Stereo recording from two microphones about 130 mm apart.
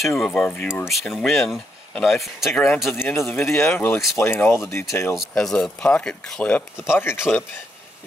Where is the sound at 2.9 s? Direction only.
15° left (ahead or behind).